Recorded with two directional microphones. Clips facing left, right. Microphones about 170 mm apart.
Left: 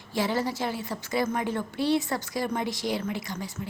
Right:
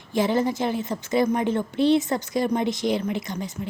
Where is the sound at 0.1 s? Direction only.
20° right (ahead or behind).